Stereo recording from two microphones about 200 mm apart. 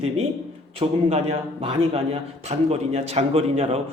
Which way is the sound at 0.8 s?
30° right (ahead or behind).